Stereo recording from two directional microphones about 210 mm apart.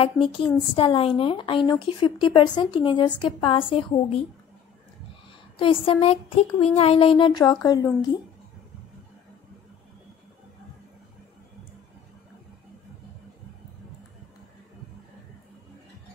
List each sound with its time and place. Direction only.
0.0 s speech: 25° left (ahead or behind)
5.6 s speech: 25° left (ahead or behind)